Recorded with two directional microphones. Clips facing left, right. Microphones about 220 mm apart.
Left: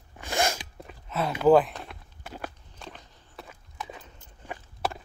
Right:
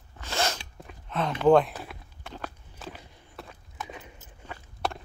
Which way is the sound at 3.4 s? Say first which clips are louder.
Left 1 dB; 5° right (ahead or behind).